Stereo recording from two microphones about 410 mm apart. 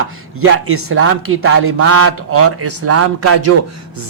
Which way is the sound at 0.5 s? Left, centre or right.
Right.